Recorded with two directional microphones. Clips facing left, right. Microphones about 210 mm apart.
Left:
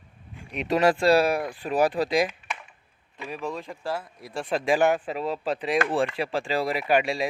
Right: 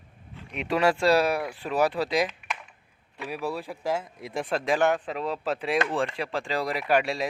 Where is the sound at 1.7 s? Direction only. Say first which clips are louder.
Left 2 dB; 15° left (ahead or behind).